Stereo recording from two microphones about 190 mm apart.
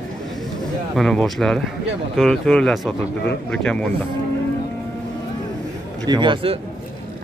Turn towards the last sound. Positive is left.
turn(degrees=-25)  # may be behind; listen again after turning